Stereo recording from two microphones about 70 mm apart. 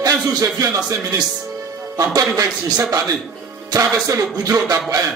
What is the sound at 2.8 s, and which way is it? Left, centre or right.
A man's voice, right.